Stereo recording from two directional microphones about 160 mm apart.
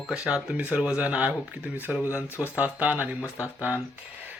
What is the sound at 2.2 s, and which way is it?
Speech, 15° left (ahead or behind).